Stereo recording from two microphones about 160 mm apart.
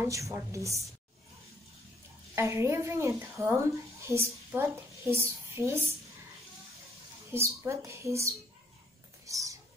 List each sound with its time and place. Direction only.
0.0 s a woman's voice: 20° right (ahead or behind)
2.3 s speech: 15° right (ahead or behind)
7.3 s speech: 15° right (ahead or behind)
9.2 s a sound: 20° right (ahead or behind)